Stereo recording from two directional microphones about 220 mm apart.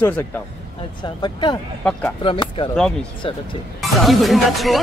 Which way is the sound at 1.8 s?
5° left (ahead or behind).